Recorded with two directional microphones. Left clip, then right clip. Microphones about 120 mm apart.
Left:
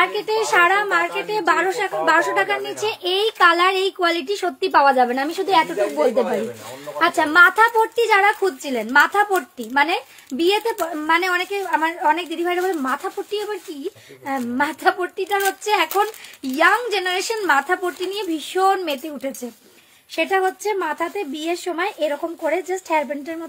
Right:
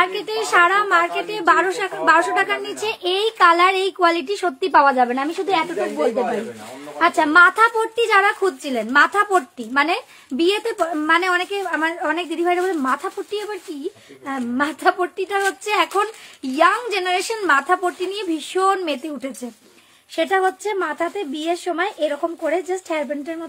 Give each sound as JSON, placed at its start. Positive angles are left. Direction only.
{"t": 0.0, "sound": "speech", "side_deg": -35}
{"t": 5.0, "sound": "speech", "side_deg": 0}
{"t": 7.0, "sound": "speech", "side_deg": -25}
{"t": 20.2, "sound": "speech", "side_deg": -15}